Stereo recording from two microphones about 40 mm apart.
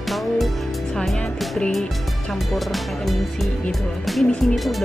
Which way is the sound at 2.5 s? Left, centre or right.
Centre.